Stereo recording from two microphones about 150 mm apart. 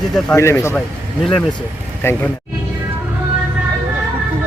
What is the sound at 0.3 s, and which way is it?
Speech, 20° left (ahead or behind).